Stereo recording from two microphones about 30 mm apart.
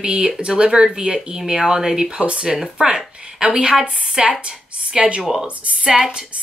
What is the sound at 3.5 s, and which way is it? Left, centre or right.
Speech, right.